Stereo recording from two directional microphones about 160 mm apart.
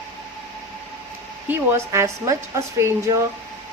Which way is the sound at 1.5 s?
15° right (ahead or behind).